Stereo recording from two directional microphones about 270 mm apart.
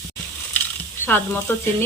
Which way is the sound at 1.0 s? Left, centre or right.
Centre.